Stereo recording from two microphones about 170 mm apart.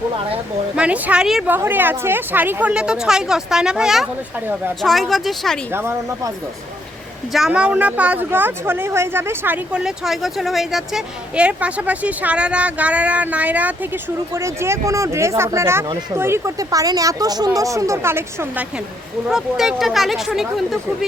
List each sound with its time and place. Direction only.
0.8 s a woman's voice: 5° right (ahead or behind)
5.7 s a woman's voice: 15° right (ahead or behind)
7.3 s a woman's voice: 5° right (ahead or behind)
19.3 s speech: centre (ahead or behind)